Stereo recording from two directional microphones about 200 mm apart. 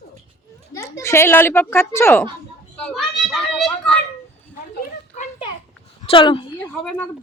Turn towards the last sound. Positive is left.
turn(degrees=25)  # may be behind; listen again after turning